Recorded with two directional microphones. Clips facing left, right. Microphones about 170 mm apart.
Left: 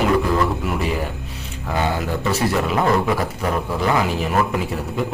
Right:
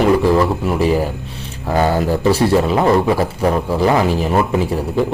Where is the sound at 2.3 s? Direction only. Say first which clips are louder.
Right 5 dB; 30° right (ahead or behind).